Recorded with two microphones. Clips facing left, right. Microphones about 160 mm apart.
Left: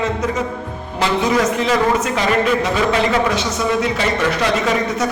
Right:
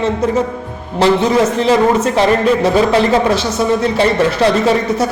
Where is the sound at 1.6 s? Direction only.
30° right (ahead or behind).